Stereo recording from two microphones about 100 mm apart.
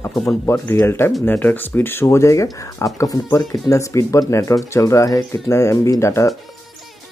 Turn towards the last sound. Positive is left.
turn(degrees=30)  # may be behind; listen again after turning